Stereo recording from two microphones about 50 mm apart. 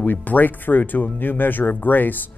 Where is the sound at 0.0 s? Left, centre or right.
Left.